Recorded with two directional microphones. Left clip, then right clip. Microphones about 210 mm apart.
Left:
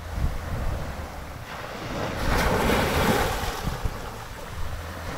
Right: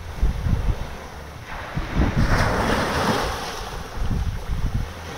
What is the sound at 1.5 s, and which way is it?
Boat, 60° left (ahead or behind).